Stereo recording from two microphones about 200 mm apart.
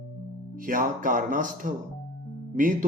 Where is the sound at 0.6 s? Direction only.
40° right (ahead or behind).